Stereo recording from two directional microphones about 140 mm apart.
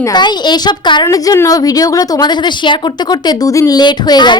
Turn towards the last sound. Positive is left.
turn(degrees=30)  # may be behind; listen again after turning